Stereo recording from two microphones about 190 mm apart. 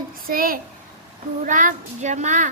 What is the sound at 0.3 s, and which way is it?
A child's voice, 50° right (ahead or behind).